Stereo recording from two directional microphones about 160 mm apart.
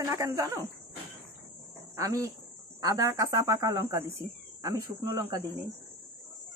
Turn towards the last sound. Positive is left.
turn(degrees=-25)  # may be behind; listen again after turning